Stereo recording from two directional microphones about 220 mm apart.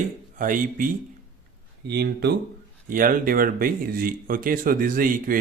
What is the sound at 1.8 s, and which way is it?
Speech, 50° right (ahead or behind).